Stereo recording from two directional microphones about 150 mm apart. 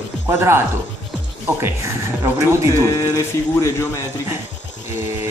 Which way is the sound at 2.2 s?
20° right (ahead or behind).